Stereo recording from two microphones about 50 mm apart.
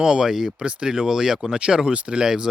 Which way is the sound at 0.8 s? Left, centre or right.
Centre.